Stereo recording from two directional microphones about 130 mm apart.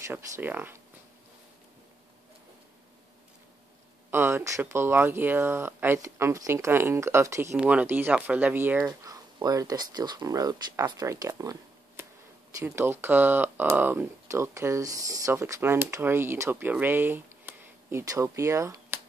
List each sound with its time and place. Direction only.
0.1 s speech: 15° right (ahead or behind)
4.1 s speech: 15° right (ahead or behind)
7.5 s speech: 10° right (ahead or behind)
9.0 s speech: 30° right (ahead or behind)
12.5 s speech: 20° right (ahead or behind)